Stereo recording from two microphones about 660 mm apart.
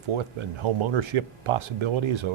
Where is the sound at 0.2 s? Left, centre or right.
Right.